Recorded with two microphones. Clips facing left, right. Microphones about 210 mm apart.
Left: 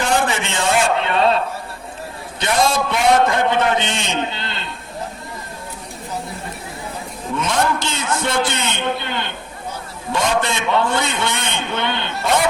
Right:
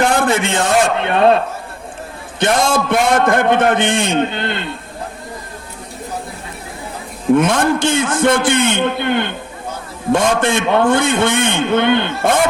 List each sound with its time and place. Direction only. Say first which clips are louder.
0.0 s a man's voice: right 5 dB; 55° right (ahead or behind)
2.4 s a man's voice: right 3 dB; 50° right (ahead or behind)
7.3 s a man's voice: right 4 dB; 55° right (ahead or behind)